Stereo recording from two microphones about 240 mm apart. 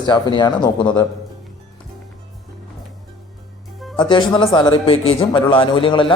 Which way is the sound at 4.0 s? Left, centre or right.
Centre.